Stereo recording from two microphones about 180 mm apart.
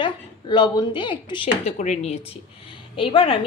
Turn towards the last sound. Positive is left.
turn(degrees=30)  # may be behind; listen again after turning